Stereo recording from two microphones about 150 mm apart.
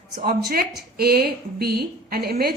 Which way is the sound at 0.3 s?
90° right.